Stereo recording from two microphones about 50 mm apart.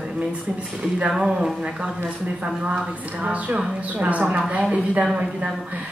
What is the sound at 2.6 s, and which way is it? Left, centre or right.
A woman's voice, right.